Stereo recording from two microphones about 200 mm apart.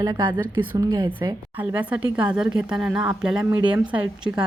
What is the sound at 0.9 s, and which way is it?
Speech, 25° right (ahead or behind).